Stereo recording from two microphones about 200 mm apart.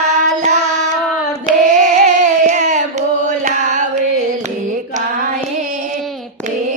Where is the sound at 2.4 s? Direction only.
40° right (ahead or behind).